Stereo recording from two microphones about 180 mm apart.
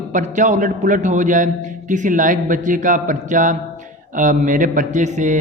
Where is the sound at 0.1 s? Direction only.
45° right (ahead or behind).